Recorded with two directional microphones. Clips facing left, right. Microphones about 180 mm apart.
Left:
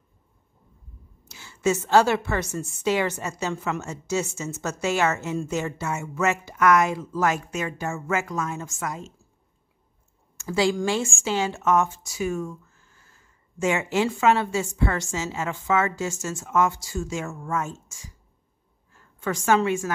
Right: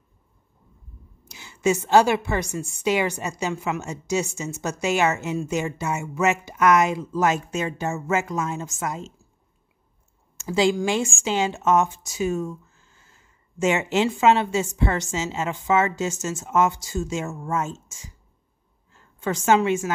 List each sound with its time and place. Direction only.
1.3 s a woman's voice: 15° right (ahead or behind)
10.3 s a woman's voice: 20° right (ahead or behind)